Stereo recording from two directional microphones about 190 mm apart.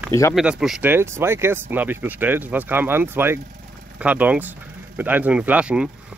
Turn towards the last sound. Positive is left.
turn(degrees=-5)  # may be behind; listen again after turning